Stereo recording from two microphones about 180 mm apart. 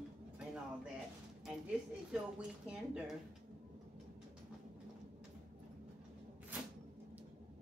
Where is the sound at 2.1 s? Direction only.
5° right (ahead or behind).